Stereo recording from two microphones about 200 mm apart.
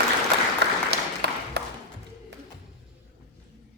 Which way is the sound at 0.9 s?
55° right (ahead or behind).